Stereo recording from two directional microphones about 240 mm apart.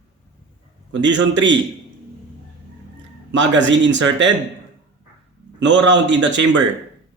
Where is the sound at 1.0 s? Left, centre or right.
Right.